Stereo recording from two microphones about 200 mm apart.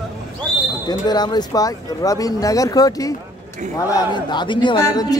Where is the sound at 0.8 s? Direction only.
20° left (ahead or behind).